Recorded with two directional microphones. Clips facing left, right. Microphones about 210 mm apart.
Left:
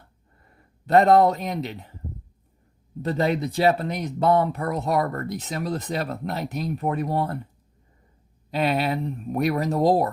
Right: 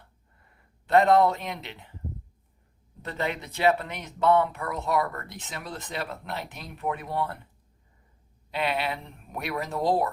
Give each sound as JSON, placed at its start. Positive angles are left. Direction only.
{"t": 0.9, "sound": "speech", "side_deg": 40}
{"t": 3.0, "sound": "speech", "side_deg": 35}
{"t": 8.4, "sound": "speech", "side_deg": 40}